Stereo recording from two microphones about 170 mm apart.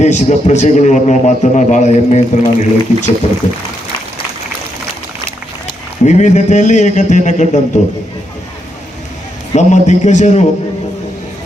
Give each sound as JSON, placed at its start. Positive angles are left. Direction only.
{"t": 0.0, "sound": "a man's voice", "side_deg": 45}
{"t": 6.1, "sound": "a man's voice", "side_deg": 45}
{"t": 9.5, "sound": "a man's voice", "side_deg": 45}